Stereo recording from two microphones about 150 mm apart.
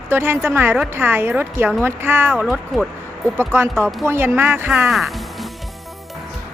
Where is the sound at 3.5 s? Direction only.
15° right (ahead or behind).